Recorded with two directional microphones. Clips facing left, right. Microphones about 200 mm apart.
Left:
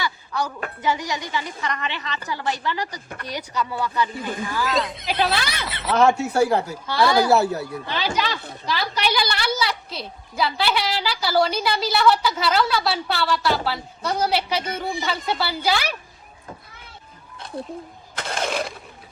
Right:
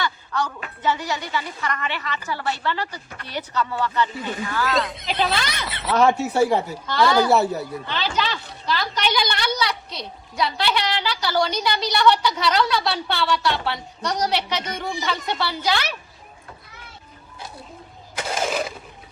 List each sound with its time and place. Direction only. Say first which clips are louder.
0.0 s a sound: right 1 dB; 10° left (ahead or behind)
0.8 s a woman's voice: right 1 dB; 15° left (ahead or behind)
4.7 s a woman's voice: even; centre (ahead or behind)
6.8 s a woman's voice: even; 10° left (ahead or behind)
7.3 s a woman's voice: even; centre (ahead or behind)
8.1 s a woman's voice: even; 10° left (ahead or behind)
18.2 s a sound: right 1 dB; 5° right (ahead or behind)